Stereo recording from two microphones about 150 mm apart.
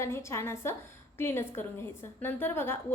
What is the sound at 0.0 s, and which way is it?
A woman's voice, 20° left (ahead or behind).